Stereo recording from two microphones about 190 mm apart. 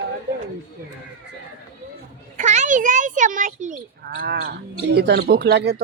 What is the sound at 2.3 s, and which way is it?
A child's voice, 40° right (ahead or behind).